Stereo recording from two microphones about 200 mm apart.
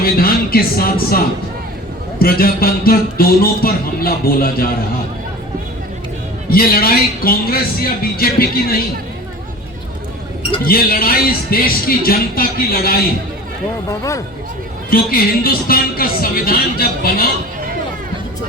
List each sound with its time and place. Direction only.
0.0 s speech: 50° left (ahead or behind)
6.5 s speech: 45° left (ahead or behind)
10.7 s speech: 50° left (ahead or behind)
14.8 s speech: 45° left (ahead or behind)